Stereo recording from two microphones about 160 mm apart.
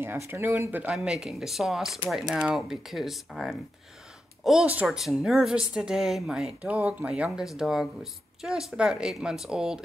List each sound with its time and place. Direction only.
0.0 s speech: 15° right (ahead or behind)